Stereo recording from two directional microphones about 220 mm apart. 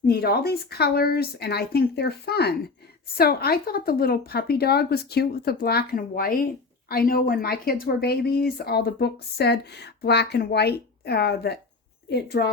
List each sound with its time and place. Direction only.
0.0 s a woman's voice: 45° left (ahead or behind)